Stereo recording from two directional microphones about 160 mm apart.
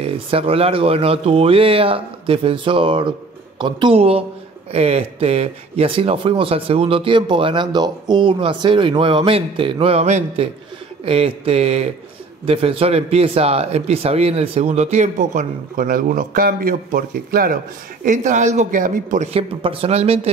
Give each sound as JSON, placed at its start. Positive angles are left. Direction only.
{"t": 0.0, "sound": "speech", "side_deg": -35}
{"t": 18.0, "sound": "speech", "side_deg": -50}
{"t": 19.3, "sound": "speech", "side_deg": -35}